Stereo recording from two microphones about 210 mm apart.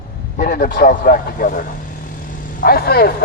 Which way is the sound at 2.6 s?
45° left (ahead or behind).